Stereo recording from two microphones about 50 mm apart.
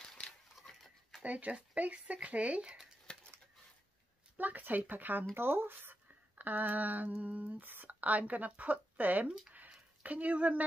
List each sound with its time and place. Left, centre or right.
1.2 s speech: right
3.1 s a sound: centre
4.4 s speech: right
5.3 s speech: right